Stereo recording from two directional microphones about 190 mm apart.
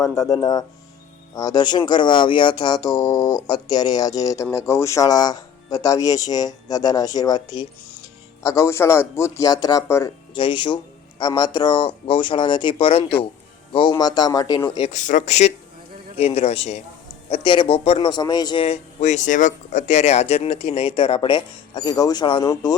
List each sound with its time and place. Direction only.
0.2 s a man's voice: 20° left (ahead or behind)
13.9 s a man's voice: 20° left (ahead or behind)
14.9 s a man's voice: 40° left (ahead or behind); by 22.7 s 20° left (ahead or behind)